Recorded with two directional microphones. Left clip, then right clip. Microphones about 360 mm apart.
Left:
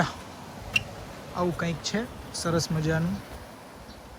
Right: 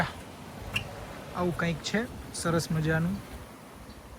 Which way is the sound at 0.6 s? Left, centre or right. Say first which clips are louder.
Left 6 dB; centre.